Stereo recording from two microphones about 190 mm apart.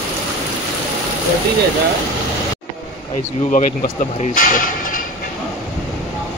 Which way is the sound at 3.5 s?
40° left (ahead or behind).